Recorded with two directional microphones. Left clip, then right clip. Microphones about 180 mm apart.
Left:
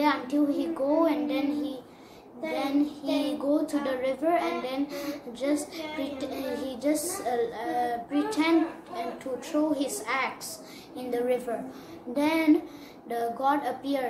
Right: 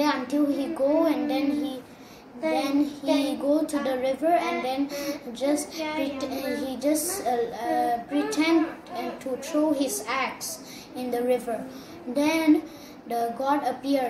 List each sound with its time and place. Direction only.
0.0 s child singing: 15° left (ahead or behind)
2.5 s a child's voice: 15° left (ahead or behind)